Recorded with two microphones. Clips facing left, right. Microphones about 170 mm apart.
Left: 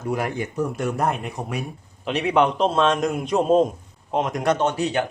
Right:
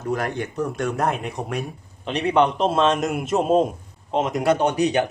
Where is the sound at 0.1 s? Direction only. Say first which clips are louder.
Even; 10° left (ahead or behind).